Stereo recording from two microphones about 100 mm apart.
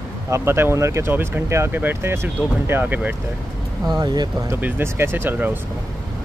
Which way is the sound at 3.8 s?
45° right (ahead or behind).